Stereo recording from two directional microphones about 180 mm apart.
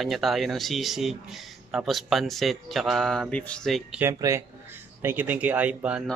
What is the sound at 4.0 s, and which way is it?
Speech, 15° right (ahead or behind).